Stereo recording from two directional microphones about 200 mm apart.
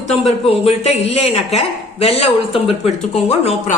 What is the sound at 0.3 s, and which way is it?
A woman's voice, 30° left (ahead or behind).